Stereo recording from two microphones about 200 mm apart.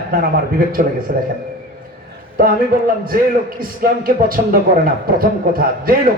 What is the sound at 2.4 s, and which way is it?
Speech, 45° right (ahead or behind).